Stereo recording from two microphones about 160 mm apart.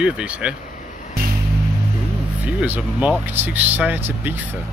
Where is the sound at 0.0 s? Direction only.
5° right (ahead or behind).